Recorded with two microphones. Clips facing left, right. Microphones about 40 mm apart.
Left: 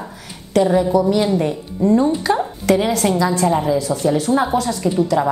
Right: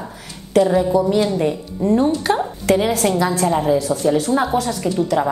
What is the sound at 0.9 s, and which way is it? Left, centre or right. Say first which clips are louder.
Speech: left 1 dB; left.